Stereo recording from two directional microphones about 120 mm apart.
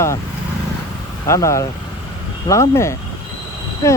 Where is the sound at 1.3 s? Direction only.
25° left (ahead or behind).